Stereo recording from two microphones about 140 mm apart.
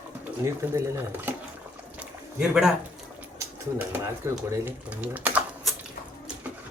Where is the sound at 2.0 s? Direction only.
5° right (ahead or behind).